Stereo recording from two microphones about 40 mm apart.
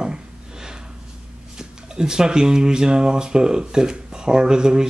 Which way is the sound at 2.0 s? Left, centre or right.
Centre.